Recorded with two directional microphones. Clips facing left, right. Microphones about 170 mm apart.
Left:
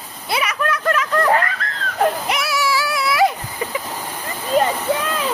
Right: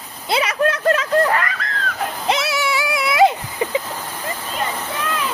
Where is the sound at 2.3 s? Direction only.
25° right (ahead or behind).